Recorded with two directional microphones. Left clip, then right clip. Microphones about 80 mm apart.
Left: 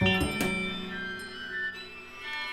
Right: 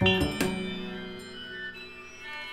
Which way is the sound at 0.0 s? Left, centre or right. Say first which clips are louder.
Right 2 dB; centre.